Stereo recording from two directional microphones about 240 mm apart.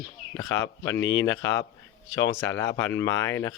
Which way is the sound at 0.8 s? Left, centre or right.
Left.